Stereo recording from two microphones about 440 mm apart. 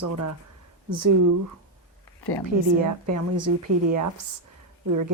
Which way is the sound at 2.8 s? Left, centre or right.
Right.